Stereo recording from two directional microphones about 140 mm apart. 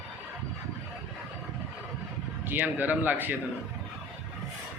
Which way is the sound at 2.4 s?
15° right (ahead or behind).